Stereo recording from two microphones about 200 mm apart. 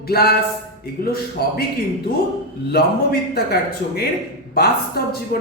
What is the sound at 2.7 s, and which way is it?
A man's voice, 50° left (ahead or behind).